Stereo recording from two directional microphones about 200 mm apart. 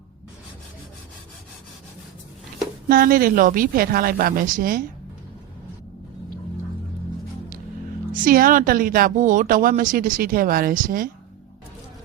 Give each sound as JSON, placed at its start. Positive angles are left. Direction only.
{"t": 2.9, "sound": "speech", "side_deg": -45}
{"t": 8.1, "sound": "speech", "side_deg": -45}